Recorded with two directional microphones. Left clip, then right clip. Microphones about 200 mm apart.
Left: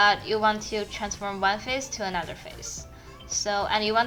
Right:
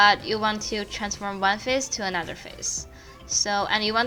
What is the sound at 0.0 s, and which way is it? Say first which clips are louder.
A woman's voice: right 2 dB; 30° right (ahead or behind).